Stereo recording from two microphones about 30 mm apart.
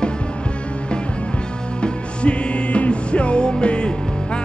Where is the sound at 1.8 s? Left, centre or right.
Left.